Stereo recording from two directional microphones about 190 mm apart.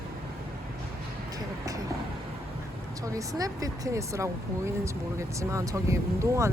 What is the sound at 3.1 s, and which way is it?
Speech, 20° right (ahead or behind).